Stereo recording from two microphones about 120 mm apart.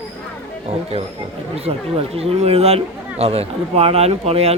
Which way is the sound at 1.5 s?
55° right (ahead or behind).